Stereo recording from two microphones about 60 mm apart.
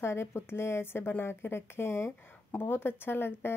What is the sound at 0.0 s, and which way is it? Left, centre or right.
Speech, left.